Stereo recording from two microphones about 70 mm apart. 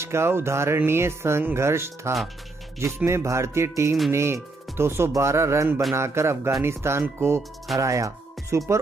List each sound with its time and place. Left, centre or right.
0.0 s speech: right
7.7 s speech: right